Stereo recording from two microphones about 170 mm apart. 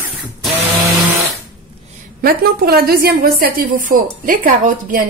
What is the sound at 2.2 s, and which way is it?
A woman's voice, 65° right (ahead or behind).